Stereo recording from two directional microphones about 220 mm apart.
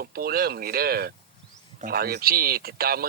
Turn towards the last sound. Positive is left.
turn(degrees=-45)  # may be behind; listen again after turning